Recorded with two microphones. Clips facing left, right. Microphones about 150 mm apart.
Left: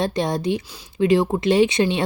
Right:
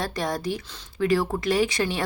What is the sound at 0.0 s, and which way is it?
Speech, 25° left (ahead or behind).